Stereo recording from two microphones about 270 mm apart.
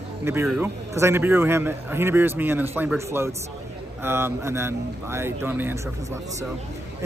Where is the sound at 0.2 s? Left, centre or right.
Centre.